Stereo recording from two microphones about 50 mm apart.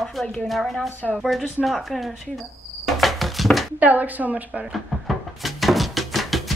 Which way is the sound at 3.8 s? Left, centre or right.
Right.